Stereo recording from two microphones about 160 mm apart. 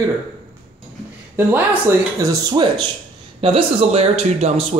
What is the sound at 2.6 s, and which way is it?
Speech, 25° right (ahead or behind).